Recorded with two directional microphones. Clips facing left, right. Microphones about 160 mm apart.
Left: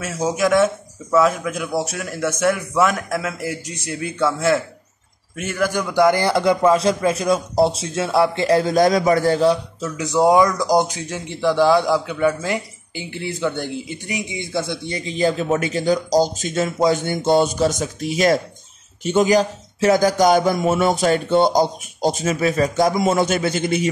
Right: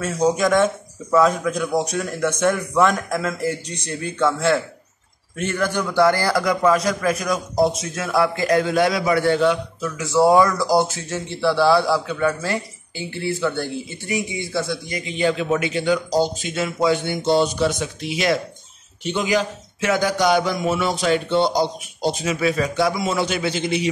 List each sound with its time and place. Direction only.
0.0 s a man's voice: 5° left (ahead or behind); by 9.6 s 40° left (ahead or behind)
9.8 s speech: 20° left (ahead or behind)
14.9 s a man's voice: 35° left (ahead or behind)